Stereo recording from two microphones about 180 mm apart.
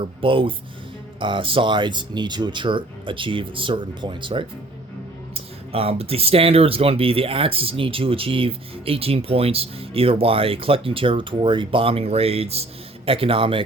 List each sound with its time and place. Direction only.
0.0 s speech: 30° right (ahead or behind)